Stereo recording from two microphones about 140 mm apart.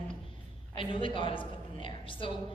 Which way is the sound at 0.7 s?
40° left (ahead or behind).